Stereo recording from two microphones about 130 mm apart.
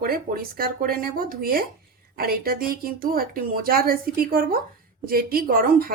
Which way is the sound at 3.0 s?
90° right.